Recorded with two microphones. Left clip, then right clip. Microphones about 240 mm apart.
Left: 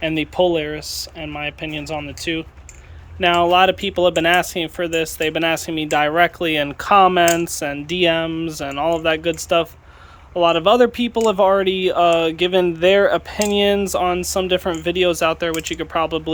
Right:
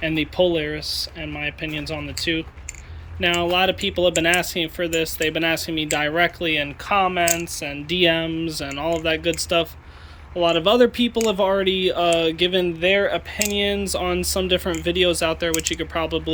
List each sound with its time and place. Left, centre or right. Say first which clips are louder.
0.0 s speech: left 2 dB; centre